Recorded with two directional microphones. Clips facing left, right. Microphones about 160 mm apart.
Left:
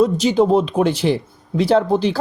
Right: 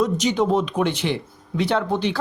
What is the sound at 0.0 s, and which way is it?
Speech, 30° left (ahead or behind).